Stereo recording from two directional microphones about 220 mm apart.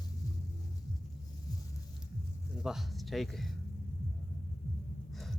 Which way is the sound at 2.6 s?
Centre (ahead or behind).